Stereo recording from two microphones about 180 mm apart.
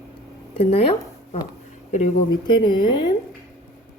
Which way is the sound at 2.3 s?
25° left (ahead or behind).